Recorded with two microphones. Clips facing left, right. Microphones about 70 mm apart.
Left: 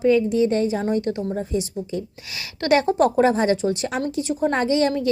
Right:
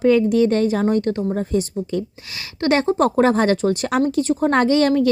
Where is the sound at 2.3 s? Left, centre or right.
Right.